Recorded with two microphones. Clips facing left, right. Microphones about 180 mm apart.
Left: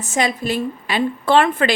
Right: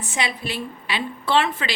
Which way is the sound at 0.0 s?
45° left (ahead or behind).